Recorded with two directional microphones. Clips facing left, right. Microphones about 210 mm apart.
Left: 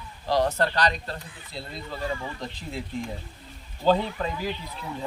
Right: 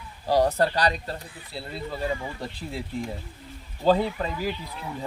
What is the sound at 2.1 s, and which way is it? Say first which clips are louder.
Speech: right 1 dB; 15° right (ahead or behind).